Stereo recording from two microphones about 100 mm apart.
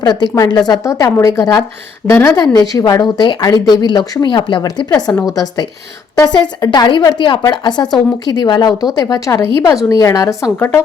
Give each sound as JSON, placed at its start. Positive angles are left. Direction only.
{"t": 0.0, "sound": "speech", "side_deg": 45}
{"t": 0.9, "sound": "speech", "side_deg": 35}
{"t": 5.2, "sound": "speech", "side_deg": 35}
{"t": 10.6, "sound": "a woman's voice", "side_deg": 20}